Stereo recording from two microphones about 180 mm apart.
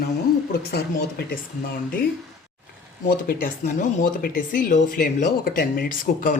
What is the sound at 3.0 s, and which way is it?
Speech, 50° left (ahead or behind).